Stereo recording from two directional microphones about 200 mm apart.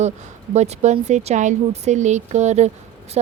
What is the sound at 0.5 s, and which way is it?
Speech, 35° right (ahead or behind).